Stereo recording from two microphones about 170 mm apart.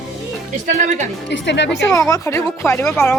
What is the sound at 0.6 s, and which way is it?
Speech, 50° right (ahead or behind).